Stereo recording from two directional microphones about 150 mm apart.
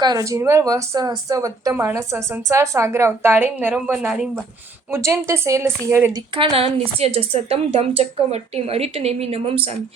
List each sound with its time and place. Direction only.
0.0 s speech: 25° right (ahead or behind); by 4.0 s 5° right (ahead or behind)
4.9 s speech: 20° right (ahead or behind)
6.3 s a woman's voice: 35° right (ahead or behind)